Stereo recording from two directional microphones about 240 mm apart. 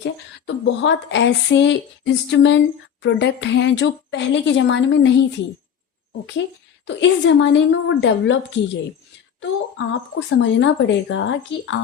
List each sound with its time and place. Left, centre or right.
0.0 s speech: left
6.8 s speech: left
9.4 s speech: left